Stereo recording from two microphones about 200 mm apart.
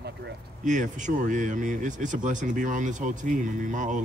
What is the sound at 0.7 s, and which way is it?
Speech, 40° right (ahead or behind).